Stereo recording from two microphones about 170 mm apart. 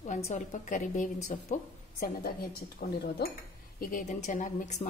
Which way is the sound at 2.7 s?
65° left (ahead or behind).